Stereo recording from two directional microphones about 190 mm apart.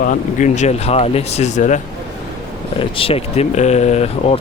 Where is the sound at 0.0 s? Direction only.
40° left (ahead or behind).